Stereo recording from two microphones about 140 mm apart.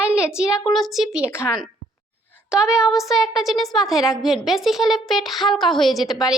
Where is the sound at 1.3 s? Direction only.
20° left (ahead or behind).